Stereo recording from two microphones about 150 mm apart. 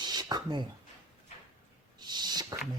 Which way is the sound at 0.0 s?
30° right (ahead or behind).